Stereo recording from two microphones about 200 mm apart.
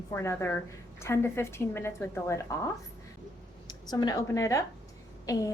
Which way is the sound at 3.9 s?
15° left (ahead or behind).